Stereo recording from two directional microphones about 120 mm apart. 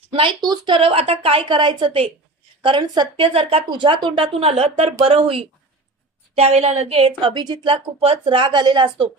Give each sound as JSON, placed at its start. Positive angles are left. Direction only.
{"t": 0.1, "sound": "a woman's voice", "side_deg": -40}
{"t": 6.3, "sound": "a woman's voice", "side_deg": -65}